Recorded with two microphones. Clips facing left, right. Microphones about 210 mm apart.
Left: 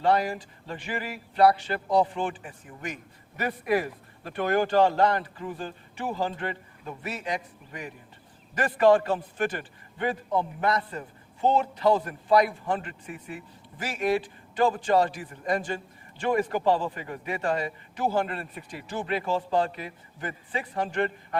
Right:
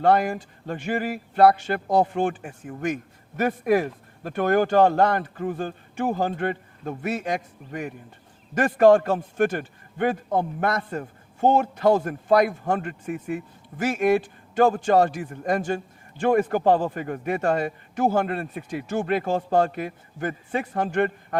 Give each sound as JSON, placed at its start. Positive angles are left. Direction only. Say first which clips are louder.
{"t": 0.0, "sound": "a man's voice", "louder": "right 4 dB", "side_deg": -50}